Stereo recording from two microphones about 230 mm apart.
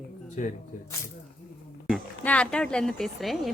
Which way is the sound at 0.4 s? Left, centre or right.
Left.